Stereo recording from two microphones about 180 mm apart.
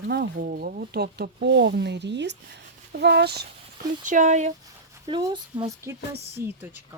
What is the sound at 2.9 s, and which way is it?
Speech, 65° right (ahead or behind).